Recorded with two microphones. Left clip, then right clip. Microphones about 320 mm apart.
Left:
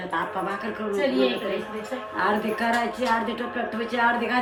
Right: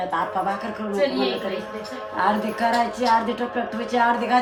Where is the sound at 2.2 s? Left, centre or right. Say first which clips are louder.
Right 3 dB; right.